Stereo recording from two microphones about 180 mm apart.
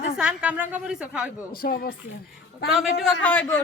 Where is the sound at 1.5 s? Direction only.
60° left (ahead or behind).